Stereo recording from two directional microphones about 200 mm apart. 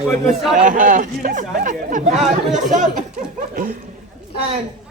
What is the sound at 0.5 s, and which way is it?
Speech, 40° right (ahead or behind).